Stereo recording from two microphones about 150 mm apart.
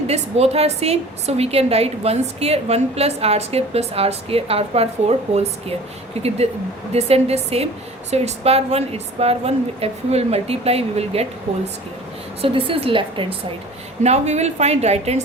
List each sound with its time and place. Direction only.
0.1 s a woman's voice: 45° right (ahead or behind)
12.4 s a woman's voice: 35° right (ahead or behind)
14.0 s a woman's voice: 45° right (ahead or behind)